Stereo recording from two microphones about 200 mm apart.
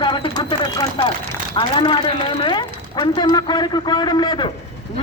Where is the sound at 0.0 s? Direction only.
20° left (ahead or behind).